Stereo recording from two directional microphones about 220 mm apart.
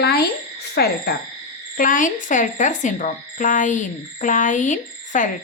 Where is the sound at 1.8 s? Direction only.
35° left (ahead or behind).